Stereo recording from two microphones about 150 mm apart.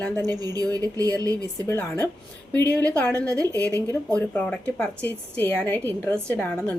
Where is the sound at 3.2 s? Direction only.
25° right (ahead or behind).